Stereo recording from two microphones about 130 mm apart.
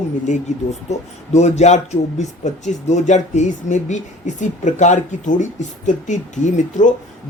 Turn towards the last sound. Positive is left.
turn(degrees=70)  # may be behind; listen again after turning